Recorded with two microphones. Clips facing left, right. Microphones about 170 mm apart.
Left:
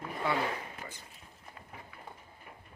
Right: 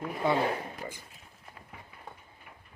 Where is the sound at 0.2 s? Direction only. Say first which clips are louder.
Right 5 dB; 25° right (ahead or behind).